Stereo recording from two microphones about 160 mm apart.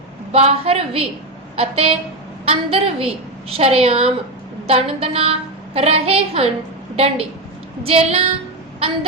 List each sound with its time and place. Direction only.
0.3 s a woman's voice: 40° right (ahead or behind)